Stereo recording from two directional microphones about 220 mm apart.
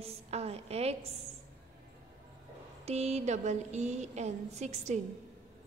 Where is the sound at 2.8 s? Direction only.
30° right (ahead or behind).